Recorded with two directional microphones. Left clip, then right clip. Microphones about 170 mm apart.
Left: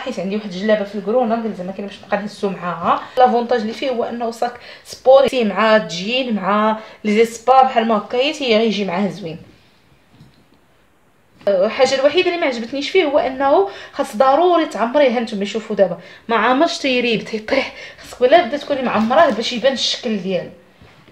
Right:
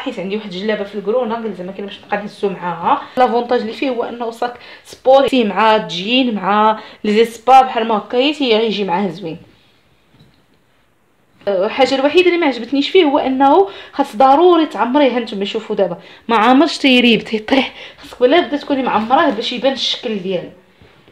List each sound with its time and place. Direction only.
0.0 s speech: 30° right (ahead or behind)
11.4 s speech: 35° right (ahead or behind)